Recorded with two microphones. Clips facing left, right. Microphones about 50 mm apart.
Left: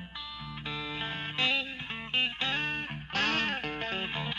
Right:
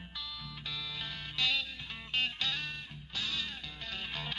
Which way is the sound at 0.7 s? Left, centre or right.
Left.